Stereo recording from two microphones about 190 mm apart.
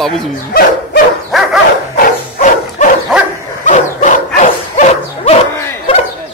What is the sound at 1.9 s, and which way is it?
Bow-wow, 45° left (ahead or behind).